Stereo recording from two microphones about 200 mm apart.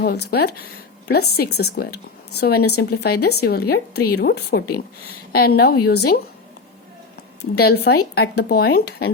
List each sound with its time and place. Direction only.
0.0 s a woman's voice: 50° left (ahead or behind)
7.5 s a woman's voice: 55° left (ahead or behind)